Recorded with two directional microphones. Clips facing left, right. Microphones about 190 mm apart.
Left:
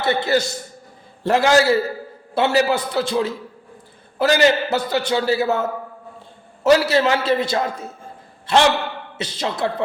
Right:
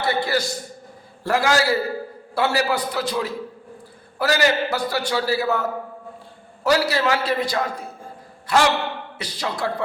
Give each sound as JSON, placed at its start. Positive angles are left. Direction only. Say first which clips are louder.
{"t": 0.0, "sound": "a man's voice", "louder": "left 3 dB", "side_deg": 25}
{"t": 6.7, "sound": "a man's voice", "louder": "left 4 dB", "side_deg": 25}